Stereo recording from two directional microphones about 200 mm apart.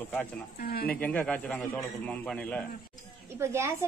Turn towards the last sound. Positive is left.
turn(degrees=-15)  # may be behind; listen again after turning